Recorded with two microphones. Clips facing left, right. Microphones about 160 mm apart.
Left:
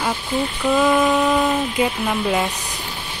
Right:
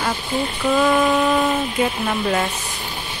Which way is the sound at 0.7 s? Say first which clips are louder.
Even; centre (ahead or behind).